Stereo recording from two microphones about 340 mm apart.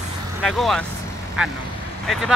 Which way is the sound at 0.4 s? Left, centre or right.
Centre.